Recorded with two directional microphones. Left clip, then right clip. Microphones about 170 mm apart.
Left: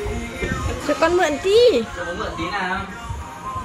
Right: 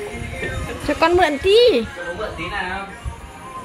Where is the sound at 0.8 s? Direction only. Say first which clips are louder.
Right 2 dB; 25° right (ahead or behind).